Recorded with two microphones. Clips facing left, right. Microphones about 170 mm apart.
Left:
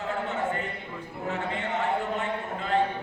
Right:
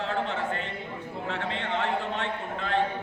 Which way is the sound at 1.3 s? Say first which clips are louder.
Left 1 dB; 75° right (ahead or behind).